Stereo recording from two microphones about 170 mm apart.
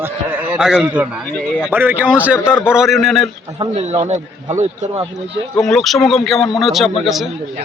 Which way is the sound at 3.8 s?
40° right (ahead or behind).